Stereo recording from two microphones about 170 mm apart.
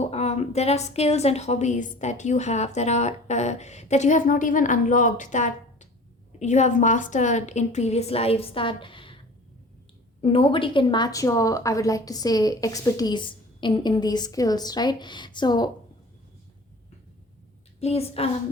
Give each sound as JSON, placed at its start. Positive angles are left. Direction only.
{"t": 0.0, "sound": "a woman's voice", "side_deg": 40}
{"t": 10.2, "sound": "a woman's voice", "side_deg": 35}
{"t": 17.7, "sound": "a woman's voice", "side_deg": 35}